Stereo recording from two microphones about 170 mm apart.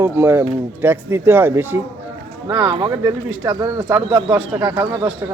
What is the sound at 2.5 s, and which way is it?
Speech, 25° right (ahead or behind).